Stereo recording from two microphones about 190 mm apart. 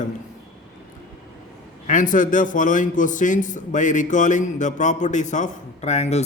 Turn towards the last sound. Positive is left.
turn(degrees=35)  # may be behind; listen again after turning